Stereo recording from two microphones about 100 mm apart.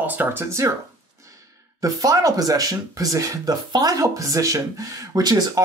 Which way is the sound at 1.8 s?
35° right (ahead or behind).